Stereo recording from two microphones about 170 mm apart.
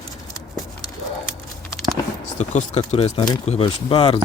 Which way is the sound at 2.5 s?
45° left (ahead or behind).